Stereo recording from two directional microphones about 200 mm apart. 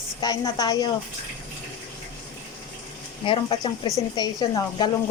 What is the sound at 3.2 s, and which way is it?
A woman's voice, 25° left (ahead or behind).